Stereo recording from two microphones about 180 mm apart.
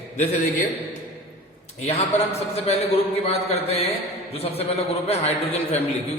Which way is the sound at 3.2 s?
35° left (ahead or behind).